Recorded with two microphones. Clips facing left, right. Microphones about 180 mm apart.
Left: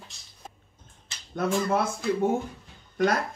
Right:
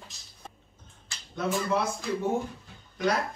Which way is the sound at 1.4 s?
50° left (ahead or behind).